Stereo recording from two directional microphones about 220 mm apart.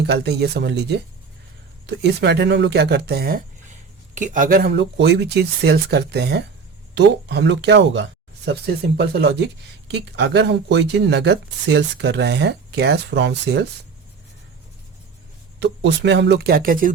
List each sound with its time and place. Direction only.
0.0 s speech: 50° right (ahead or behind)
15.6 s speech: 50° right (ahead or behind)